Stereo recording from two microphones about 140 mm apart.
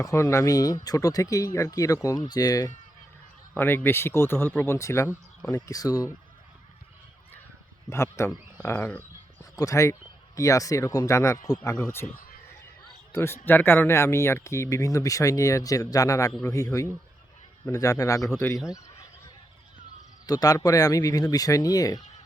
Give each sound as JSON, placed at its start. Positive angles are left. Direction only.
{"t": 0.0, "sound": "speech", "side_deg": 20}
{"t": 3.5, "sound": "speech", "side_deg": 15}
{"t": 7.9, "sound": "speech", "side_deg": 20}
{"t": 12.0, "sound": "a sound", "side_deg": 90}
{"t": 13.1, "sound": "speech", "side_deg": 15}
{"t": 20.2, "sound": "speech", "side_deg": 25}